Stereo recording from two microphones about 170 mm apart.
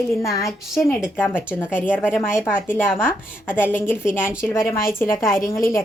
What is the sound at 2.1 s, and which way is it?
Speech, 15° left (ahead or behind).